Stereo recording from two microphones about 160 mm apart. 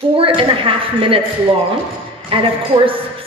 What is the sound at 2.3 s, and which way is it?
Speech, 35° right (ahead or behind).